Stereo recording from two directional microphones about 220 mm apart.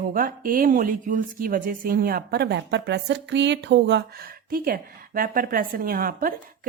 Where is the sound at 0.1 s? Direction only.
40° right (ahead or behind).